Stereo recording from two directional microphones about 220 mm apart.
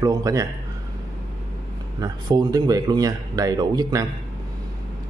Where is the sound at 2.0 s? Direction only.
15° right (ahead or behind).